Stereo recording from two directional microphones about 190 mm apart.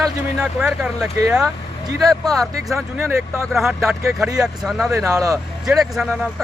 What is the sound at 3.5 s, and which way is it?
Speech, centre (ahead or behind).